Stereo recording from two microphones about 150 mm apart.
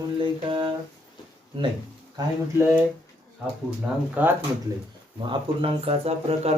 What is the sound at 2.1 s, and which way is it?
Speech, 15° right (ahead or behind).